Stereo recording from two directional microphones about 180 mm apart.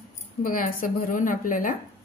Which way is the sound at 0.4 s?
50° left (ahead or behind).